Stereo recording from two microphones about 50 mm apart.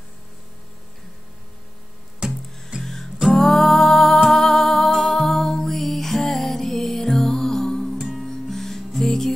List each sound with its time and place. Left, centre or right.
2.2 s music: centre
2.8 s music: centre
8.0 s music: centre
8.3 s music: centre